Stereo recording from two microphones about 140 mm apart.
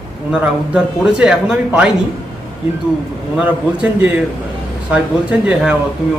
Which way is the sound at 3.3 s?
10° right (ahead or behind).